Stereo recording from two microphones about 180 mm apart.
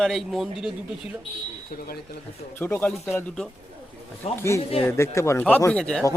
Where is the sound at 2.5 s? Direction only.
10° left (ahead or behind).